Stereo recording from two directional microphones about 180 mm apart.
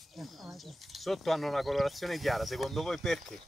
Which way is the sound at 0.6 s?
Centre (ahead or behind).